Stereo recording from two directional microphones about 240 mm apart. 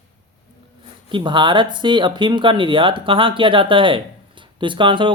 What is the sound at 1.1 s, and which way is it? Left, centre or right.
Speech, centre.